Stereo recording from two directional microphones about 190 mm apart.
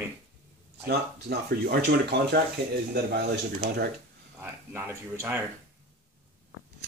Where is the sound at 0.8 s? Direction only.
55° right (ahead or behind).